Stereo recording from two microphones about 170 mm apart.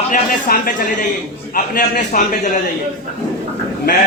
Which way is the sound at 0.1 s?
55° left (ahead or behind).